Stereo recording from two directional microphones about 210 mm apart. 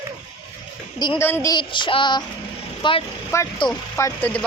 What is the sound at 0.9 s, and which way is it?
Speech, 20° left (ahead or behind).